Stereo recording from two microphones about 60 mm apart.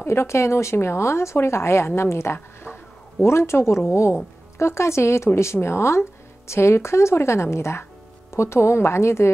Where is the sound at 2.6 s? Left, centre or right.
Left.